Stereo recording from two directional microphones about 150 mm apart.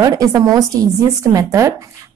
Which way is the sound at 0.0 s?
25° right (ahead or behind).